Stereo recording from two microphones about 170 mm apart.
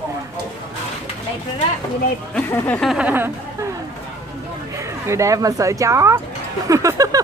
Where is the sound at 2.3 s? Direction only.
10° left (ahead or behind).